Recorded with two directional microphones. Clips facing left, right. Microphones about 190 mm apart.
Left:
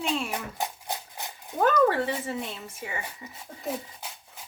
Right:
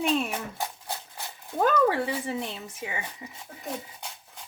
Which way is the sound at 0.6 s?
20° left (ahead or behind).